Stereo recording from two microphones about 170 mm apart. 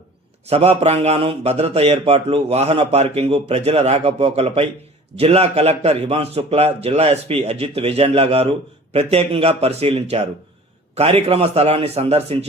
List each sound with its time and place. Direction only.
0.4 s a man's voice: 35° right (ahead or behind)